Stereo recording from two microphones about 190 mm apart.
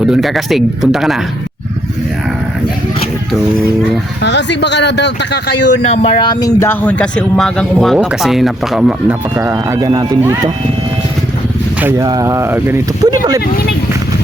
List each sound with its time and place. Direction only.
0.0 s speech: centre (ahead or behind)
4.2 s speech: 65° left (ahead or behind)
5.9 s speech: 30° left (ahead or behind); by 10.5 s 15° right (ahead or behind)
11.8 s speech: 15° right (ahead or behind)